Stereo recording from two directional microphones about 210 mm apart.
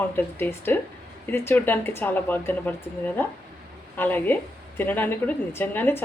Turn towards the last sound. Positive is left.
turn(degrees=10)  # may be behind; listen again after turning